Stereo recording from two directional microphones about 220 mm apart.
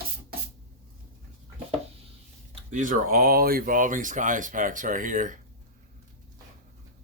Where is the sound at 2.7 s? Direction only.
35° right (ahead or behind).